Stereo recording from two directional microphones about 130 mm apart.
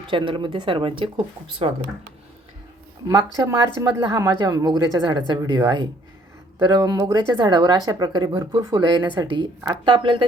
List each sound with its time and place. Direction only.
0.1 s speech: 40° right (ahead or behind)
3.1 s a woman's voice: 25° right (ahead or behind)